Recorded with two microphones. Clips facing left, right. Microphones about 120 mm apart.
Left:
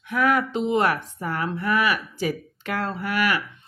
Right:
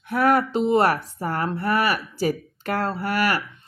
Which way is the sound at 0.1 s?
40° right (ahead or behind).